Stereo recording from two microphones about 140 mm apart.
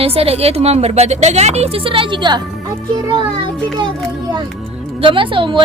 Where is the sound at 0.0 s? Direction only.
45° right (ahead or behind).